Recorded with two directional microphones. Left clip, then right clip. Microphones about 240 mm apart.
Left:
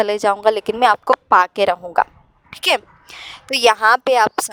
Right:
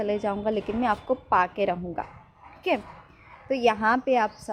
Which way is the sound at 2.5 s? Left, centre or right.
Left.